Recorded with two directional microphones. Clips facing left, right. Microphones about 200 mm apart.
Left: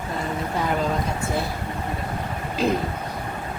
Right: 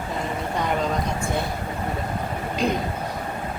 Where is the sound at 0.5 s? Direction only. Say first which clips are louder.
Even; 5° left (ahead or behind).